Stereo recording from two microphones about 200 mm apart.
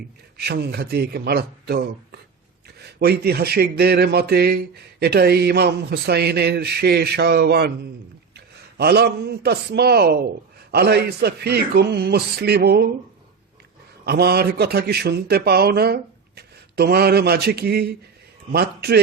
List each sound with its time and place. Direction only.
0.3 s speech: 55° right (ahead or behind)
8.8 s speech: 55° right (ahead or behind)
14.0 s speech: 55° right (ahead or behind)